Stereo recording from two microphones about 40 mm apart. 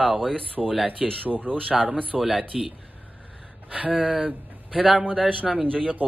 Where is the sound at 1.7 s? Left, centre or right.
Right.